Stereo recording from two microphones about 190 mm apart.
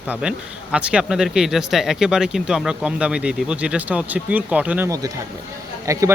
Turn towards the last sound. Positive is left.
turn(degrees=-15)  # may be behind; listen again after turning